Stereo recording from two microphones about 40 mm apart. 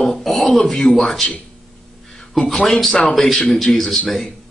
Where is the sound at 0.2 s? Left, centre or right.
Centre.